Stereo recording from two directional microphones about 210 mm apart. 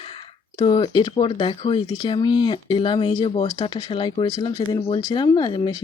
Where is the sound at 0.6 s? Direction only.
20° left (ahead or behind).